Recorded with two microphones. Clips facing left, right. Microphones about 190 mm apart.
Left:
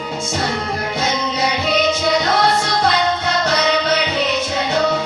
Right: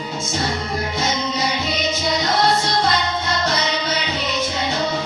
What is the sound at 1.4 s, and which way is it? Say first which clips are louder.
Music: left 5 dB; 65° left (ahead or behind).